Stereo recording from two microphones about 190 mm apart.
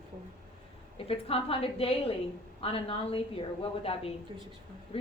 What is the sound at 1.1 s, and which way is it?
A woman's voice, 30° left (ahead or behind).